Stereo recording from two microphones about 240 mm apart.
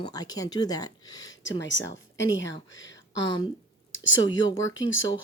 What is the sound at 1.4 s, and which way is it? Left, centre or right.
Speech, left.